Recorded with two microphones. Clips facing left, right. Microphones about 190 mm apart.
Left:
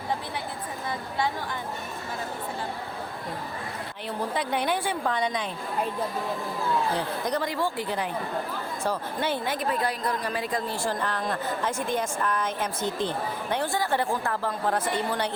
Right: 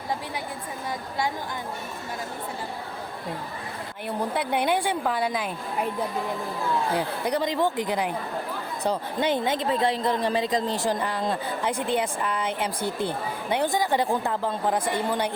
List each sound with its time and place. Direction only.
4.4 s a woman's voice: 10° right (ahead or behind)
6.9 s a woman's voice: 10° right (ahead or behind)